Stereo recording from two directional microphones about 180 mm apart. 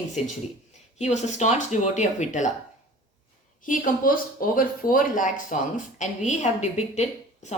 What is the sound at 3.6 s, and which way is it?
Speech, 45° left (ahead or behind).